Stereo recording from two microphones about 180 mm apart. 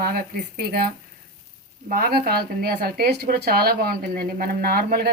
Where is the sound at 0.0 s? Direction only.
60° right (ahead or behind).